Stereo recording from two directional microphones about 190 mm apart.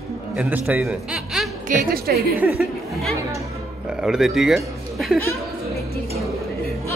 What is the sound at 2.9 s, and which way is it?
Speech, centre (ahead or behind).